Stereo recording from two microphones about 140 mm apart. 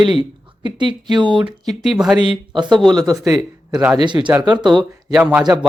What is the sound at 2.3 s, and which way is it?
Speech, 35° right (ahead or behind).